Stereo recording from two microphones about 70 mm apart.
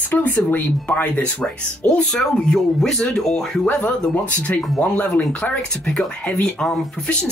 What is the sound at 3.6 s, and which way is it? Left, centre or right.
Speech, centre.